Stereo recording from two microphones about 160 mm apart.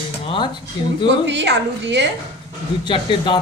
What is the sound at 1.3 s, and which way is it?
Speech, 90° right.